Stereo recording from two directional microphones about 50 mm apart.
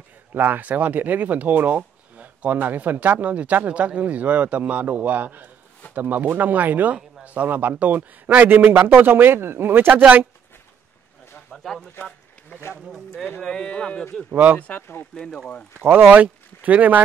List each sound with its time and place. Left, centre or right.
0.3 s a man's voice: right
11.5 s speech: centre
12.0 s a sound: left
12.8 s speech: centre
14.3 s speech: right
14.8 s speech: left
15.1 s speech: centre
15.8 s a man's voice: right
16.1 s speech: right